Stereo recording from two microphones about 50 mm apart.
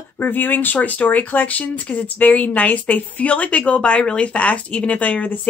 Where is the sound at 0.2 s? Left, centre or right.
Left.